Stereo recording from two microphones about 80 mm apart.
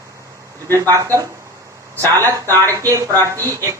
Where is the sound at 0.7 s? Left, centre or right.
Right.